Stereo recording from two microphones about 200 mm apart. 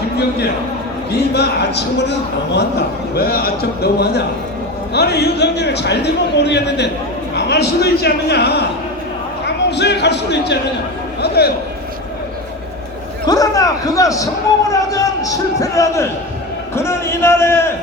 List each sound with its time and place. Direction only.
1.1 s a man's voice: 55° left (ahead or behind)
9.6 s a man's voice: 55° left (ahead or behind)
13.2 s a man's voice: 20° left (ahead or behind)